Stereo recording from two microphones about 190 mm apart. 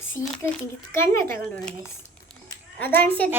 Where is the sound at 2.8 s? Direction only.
10° left (ahead or behind).